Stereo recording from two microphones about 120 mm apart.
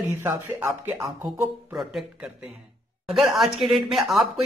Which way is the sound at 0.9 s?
20° right (ahead or behind).